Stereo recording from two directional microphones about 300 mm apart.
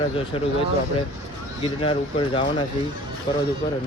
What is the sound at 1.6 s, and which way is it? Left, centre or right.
Speech, centre.